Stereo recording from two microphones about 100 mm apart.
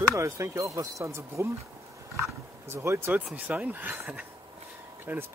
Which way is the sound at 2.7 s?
25° right (ahead or behind).